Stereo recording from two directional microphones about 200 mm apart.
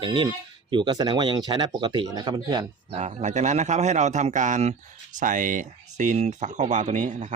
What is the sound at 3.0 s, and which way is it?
Speech, 35° right (ahead or behind).